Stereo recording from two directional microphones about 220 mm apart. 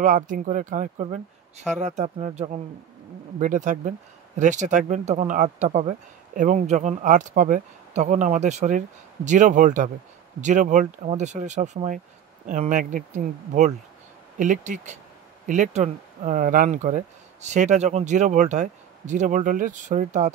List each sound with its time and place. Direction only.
0.0 s speech: 35° right (ahead or behind)